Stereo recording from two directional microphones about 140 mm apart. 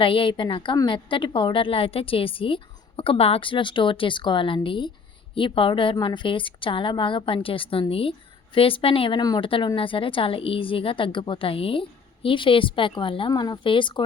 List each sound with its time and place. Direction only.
0.0 s a woman's voice: 40° left (ahead or behind)